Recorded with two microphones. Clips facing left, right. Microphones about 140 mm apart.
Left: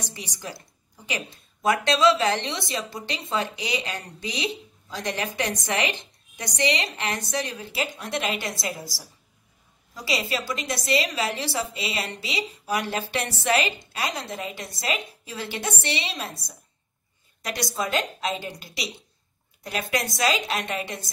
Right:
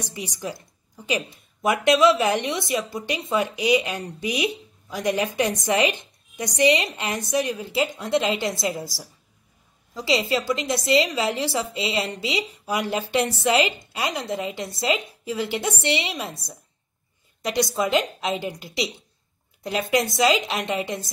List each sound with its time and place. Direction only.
0.1 s a woman's voice: 20° right (ahead or behind)
10.0 s a woman's voice: 20° right (ahead or behind)
17.4 s a woman's voice: 20° right (ahead or behind)